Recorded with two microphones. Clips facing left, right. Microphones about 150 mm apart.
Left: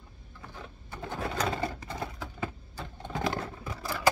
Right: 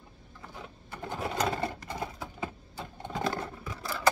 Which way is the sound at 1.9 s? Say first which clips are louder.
Even; 20° right (ahead or behind).